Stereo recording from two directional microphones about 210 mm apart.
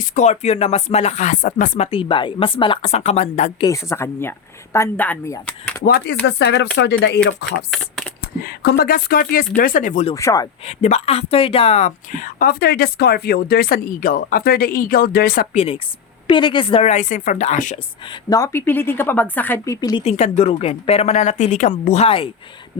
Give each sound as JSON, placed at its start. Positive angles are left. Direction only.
{"t": 0.0, "sound": "speech", "side_deg": 35}
{"t": 3.7, "sound": "speech", "side_deg": 15}
{"t": 5.8, "sound": "speech", "side_deg": 45}
{"t": 7.7, "sound": "speech", "side_deg": 0}
{"t": 8.2, "sound": "speech", "side_deg": 50}
{"t": 10.2, "sound": "speech", "side_deg": 15}
{"t": 10.7, "sound": "speech", "side_deg": 30}
{"t": 15.5, "sound": "a woman's voice", "side_deg": 30}
{"t": 18.1, "sound": "a woman's voice", "side_deg": 15}